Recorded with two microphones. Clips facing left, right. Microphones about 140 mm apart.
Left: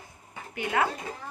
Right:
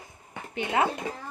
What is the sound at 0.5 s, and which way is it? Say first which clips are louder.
Speech: right 1 dB; 20° right (ahead or behind).